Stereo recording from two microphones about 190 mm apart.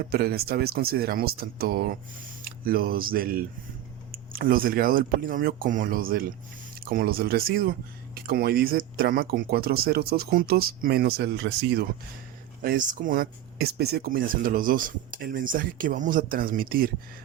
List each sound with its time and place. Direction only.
0.1 s speech: 55° right (ahead or behind)
12.6 s speech: 45° right (ahead or behind)